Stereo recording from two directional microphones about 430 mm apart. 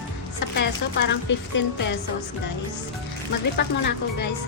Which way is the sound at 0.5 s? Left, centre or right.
Left.